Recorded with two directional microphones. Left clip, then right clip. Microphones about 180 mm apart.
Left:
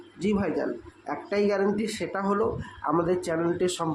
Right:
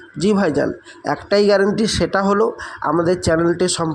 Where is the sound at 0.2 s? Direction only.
40° right (ahead or behind).